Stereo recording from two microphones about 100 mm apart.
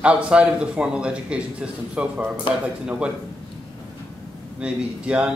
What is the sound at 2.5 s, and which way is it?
Speech, 55° left (ahead or behind).